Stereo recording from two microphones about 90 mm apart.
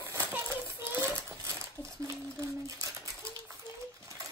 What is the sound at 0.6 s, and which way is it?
Rattle, 25° right (ahead or behind).